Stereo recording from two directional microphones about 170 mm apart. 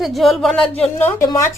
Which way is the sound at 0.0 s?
Centre (ahead or behind).